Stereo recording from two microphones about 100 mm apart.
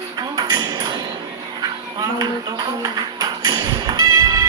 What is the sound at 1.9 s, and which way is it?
Speech, 40° right (ahead or behind).